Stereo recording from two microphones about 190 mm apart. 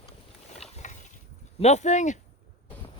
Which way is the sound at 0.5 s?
40° left (ahead or behind).